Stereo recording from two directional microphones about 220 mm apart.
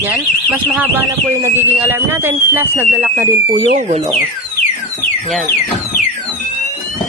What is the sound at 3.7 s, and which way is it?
Speech, 30° right (ahead or behind).